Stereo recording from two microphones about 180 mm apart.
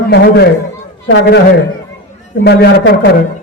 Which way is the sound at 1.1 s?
80° left.